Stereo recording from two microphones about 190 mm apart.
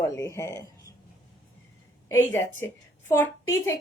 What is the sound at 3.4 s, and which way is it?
Speech, 90° left.